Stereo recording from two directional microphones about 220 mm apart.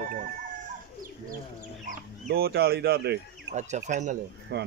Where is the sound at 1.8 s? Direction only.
45° right (ahead or behind).